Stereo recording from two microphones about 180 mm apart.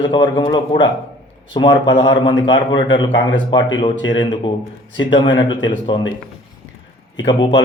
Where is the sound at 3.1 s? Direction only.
90° left.